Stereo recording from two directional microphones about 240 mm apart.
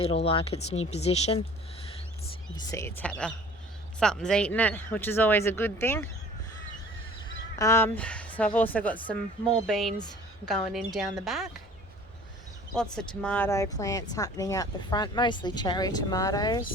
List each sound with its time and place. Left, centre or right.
0.0 s speech: left
2.6 s speech: centre
7.6 s speech: centre
12.7 s speech: centre